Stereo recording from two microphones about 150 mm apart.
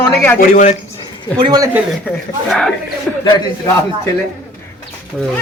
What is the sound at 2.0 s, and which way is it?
Speech, 5° left (ahead or behind).